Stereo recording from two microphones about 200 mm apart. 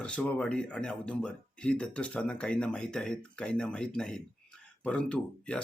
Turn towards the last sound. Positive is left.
turn(degrees=5)  # may be behind; listen again after turning